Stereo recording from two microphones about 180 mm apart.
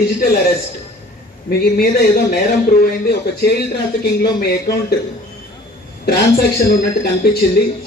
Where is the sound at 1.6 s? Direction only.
60° left (ahead or behind).